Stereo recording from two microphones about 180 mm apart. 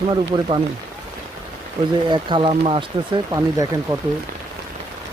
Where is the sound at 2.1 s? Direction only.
25° right (ahead or behind).